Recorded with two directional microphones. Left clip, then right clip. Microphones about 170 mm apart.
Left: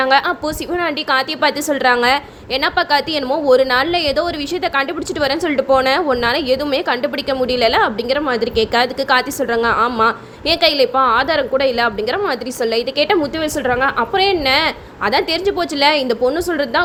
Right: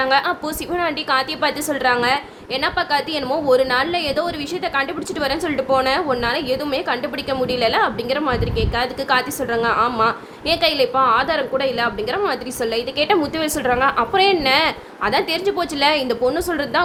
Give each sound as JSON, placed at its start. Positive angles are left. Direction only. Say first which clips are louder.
{"t": 0.0, "sound": "a woman's voice", "louder": "left 3 dB", "side_deg": 30}
{"t": 13.4, "sound": "a woman's voice", "louder": "left 1 dB", "side_deg": 15}